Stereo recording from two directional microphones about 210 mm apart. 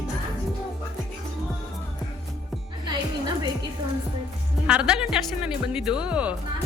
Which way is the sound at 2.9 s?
20° right (ahead or behind).